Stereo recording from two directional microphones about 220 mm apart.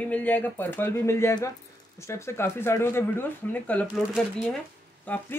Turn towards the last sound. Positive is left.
turn(degrees=5)  # may be behind; listen again after turning